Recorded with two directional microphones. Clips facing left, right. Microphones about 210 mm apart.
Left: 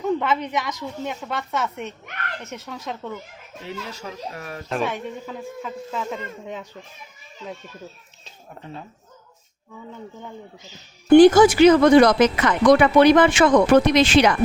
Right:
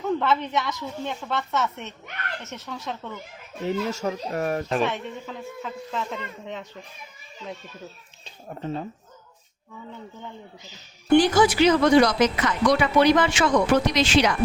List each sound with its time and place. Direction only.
0.2 s speech: 15° left (ahead or behind)
3.7 s speech: 45° right (ahead or behind)
4.7 s speech: 5° left (ahead or behind)
11.1 s speech: 50° left (ahead or behind)